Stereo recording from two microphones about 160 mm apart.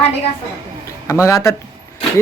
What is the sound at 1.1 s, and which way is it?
Speech, 20° left (ahead or behind).